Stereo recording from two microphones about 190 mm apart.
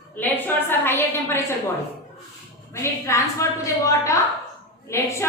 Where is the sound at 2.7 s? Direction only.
15° left (ahead or behind).